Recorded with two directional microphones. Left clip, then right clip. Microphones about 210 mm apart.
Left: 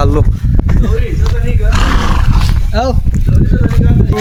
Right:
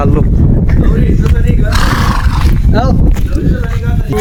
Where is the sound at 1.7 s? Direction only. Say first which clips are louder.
Right 1 dB; 50° right (ahead or behind).